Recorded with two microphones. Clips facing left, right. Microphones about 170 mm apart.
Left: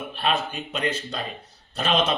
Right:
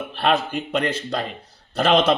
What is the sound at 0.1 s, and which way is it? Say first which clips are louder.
Speech: right 5 dB; 70° right (ahead or behind).